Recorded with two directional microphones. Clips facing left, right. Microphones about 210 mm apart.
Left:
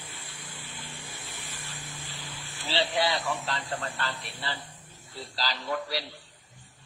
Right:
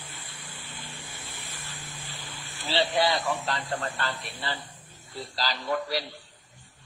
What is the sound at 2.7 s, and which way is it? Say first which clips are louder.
Speech: right 3 dB; 50° right (ahead or behind).